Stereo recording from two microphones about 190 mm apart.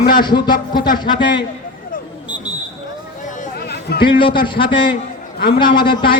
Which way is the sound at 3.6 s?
55° left (ahead or behind).